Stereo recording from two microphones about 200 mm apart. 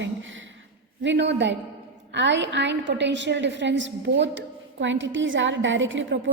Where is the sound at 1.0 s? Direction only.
60° right (ahead or behind).